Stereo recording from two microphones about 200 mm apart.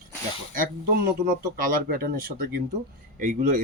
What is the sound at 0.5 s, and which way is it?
Speech, 45° right (ahead or behind).